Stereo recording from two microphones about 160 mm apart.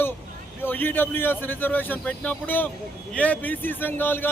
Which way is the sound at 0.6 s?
10° left (ahead or behind).